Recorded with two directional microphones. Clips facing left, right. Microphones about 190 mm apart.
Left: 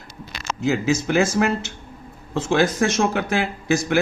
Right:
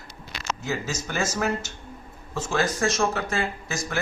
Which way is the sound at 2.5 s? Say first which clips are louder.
Left 6 dB; 65° left (ahead or behind).